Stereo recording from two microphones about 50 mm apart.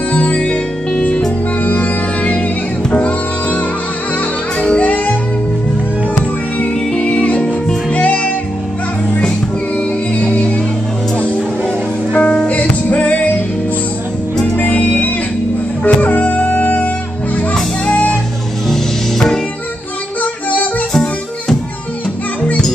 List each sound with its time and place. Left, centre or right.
0.1 s music: left
1.6 s music: left
6.9 s music: centre
9.8 s music: left
14.6 s music: left
18.7 s music: centre